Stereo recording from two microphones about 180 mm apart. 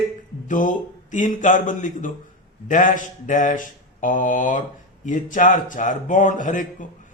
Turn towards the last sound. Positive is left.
turn(degrees=45)  # may be behind; listen again after turning